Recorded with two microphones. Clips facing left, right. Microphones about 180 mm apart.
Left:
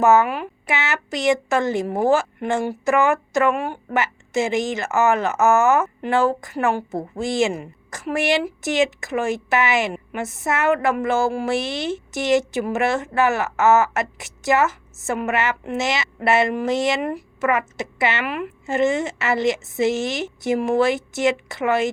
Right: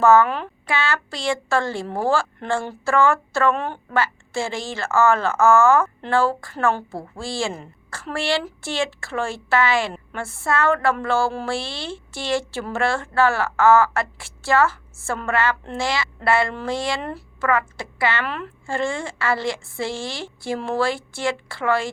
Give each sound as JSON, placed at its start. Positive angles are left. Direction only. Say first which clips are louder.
{"t": 0.0, "sound": "a woman's voice", "louder": "right 1 dB", "side_deg": 20}